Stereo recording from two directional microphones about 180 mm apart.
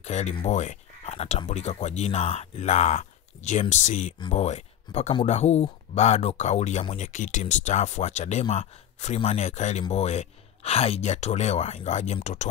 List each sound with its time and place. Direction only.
0.0 s speech: 35° left (ahead or behind)